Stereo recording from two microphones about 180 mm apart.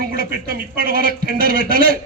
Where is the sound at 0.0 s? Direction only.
55° right (ahead or behind).